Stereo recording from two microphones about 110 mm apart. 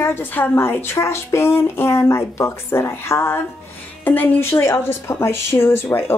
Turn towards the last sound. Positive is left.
turn(degrees=20)  # may be behind; listen again after turning